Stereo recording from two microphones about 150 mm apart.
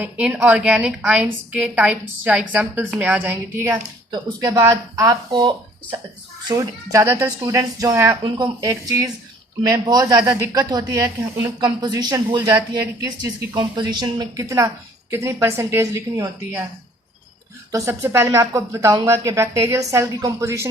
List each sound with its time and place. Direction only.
0.0 s a woman's voice: 5° right (ahead or behind)
17.7 s speech: 20° right (ahead or behind)